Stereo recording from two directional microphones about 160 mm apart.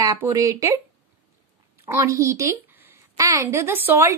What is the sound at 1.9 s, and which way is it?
A woman's voice, 20° right (ahead or behind).